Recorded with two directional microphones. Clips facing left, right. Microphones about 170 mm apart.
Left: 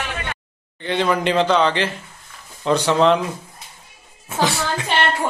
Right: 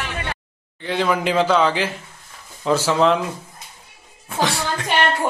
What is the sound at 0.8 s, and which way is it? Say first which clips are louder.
A man's voice: left 1 dB; 5° right (ahead or behind).